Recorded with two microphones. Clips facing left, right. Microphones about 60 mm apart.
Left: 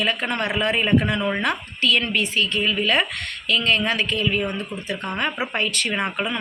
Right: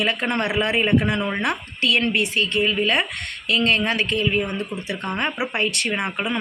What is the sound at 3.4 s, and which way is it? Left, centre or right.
Speech, right.